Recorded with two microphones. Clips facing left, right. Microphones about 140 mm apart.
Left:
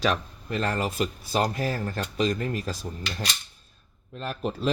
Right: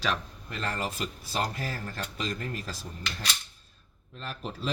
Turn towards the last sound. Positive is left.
turn(degrees=55)  # may be behind; listen again after turning